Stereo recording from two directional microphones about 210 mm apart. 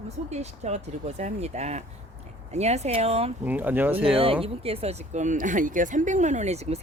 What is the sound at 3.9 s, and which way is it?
Speech, 25° right (ahead or behind).